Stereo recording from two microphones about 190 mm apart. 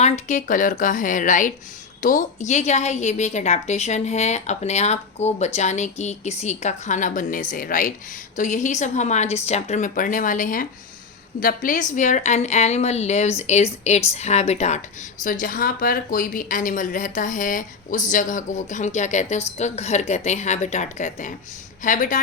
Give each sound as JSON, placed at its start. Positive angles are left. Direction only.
{"t": 0.0, "sound": "a woman's voice", "side_deg": 40}